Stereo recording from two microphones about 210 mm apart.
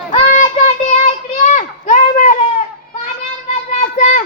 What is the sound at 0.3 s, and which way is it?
Child singing, 35° left (ahead or behind).